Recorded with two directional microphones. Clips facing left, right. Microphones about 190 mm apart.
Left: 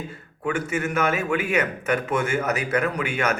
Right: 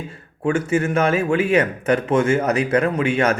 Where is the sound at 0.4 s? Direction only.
30° right (ahead or behind).